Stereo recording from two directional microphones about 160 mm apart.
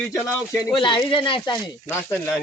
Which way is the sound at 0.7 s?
30° left (ahead or behind).